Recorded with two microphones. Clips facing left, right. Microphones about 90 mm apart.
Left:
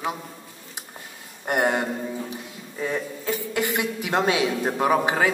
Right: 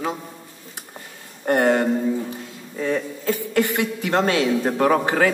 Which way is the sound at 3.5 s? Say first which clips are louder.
Right 5 dB; 15° left (ahead or behind).